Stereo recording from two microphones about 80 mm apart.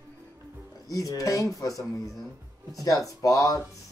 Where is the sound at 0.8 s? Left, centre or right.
Left.